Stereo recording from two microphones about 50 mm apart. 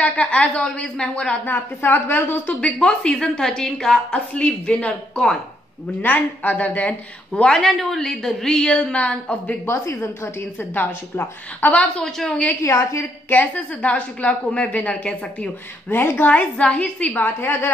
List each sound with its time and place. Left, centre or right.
0.0 s a woman's voice: left
1.4 s a woman's voice: left
2.6 s a woman's voice: centre
4.3 s a woman's voice: left
5.1 s a woman's voice: centre
6.0 s a woman's voice: left
7.4 s a woman's voice: centre
9.9 s a woman's voice: left
12.0 s a woman's voice: centre
13.3 s a woman's voice: left
15.9 s a woman's voice: left
16.3 s a woman's voice: left
17.2 s a woman's voice: left